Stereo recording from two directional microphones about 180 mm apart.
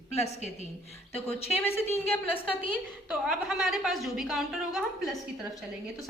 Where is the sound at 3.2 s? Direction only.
5° right (ahead or behind).